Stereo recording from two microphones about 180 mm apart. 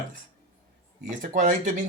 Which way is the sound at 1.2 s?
45° right (ahead or behind).